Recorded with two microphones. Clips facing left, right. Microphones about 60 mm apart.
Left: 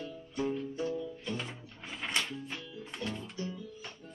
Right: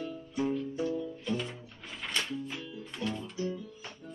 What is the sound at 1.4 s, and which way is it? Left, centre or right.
Music, centre.